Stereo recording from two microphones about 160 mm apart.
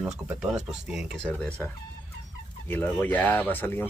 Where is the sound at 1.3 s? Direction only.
10° left (ahead or behind).